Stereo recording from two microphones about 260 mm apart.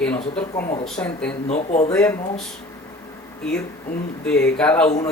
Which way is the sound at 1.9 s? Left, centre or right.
Centre.